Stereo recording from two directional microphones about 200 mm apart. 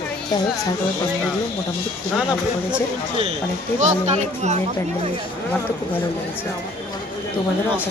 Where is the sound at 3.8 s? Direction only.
35° right (ahead or behind).